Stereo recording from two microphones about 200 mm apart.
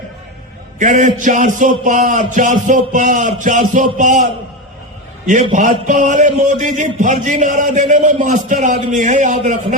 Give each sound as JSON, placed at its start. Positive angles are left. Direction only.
{"t": 0.8, "sound": "a man's voice", "side_deg": -35}